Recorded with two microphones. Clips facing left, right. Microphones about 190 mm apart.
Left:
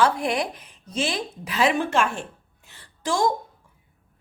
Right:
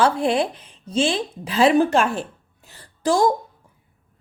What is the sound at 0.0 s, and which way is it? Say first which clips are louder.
Speech: right 3 dB; 30° right (ahead or behind).